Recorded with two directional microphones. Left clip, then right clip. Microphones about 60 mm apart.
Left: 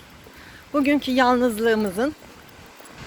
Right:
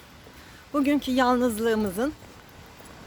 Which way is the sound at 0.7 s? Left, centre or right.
Right.